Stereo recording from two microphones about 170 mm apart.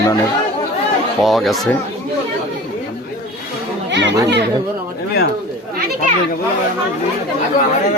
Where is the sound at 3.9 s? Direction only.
90° right.